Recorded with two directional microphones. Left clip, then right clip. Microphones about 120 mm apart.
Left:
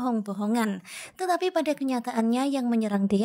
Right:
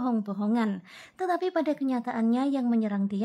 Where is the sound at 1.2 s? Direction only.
40° left (ahead or behind).